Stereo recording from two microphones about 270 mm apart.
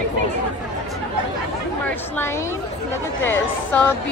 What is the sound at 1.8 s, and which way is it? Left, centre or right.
Speech, centre.